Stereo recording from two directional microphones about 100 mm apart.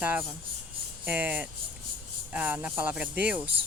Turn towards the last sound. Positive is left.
turn(degrees=-15)  # may be behind; listen again after turning